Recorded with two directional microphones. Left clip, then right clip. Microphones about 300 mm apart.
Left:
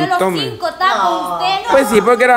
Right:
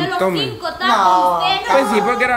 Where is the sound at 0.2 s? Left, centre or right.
Centre.